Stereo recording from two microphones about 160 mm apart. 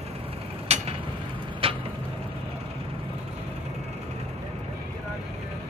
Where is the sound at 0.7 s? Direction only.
40° right (ahead or behind).